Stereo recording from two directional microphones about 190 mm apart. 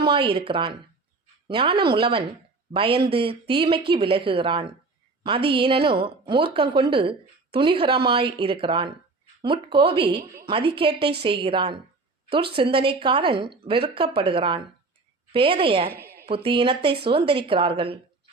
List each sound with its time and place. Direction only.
0.1 s speech: 25° right (ahead or behind)
15.9 s a sound: 55° right (ahead or behind)
16.2 s speech: 30° right (ahead or behind)